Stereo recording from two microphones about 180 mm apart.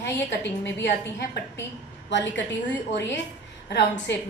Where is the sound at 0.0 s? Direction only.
75° left (ahead or behind).